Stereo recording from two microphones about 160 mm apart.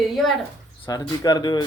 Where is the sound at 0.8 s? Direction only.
25° left (ahead or behind).